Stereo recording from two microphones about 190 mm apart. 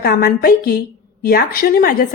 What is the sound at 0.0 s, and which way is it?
Speech, 50° left (ahead or behind).